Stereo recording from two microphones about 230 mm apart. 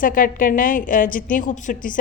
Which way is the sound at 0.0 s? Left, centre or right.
Left.